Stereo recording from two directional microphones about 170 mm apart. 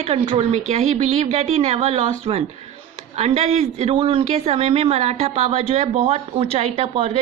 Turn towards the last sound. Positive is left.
turn(degrees=-35)  # may be behind; listen again after turning